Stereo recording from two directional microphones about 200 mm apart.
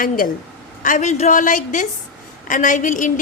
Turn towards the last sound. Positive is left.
turn(degrees=40)  # may be behind; listen again after turning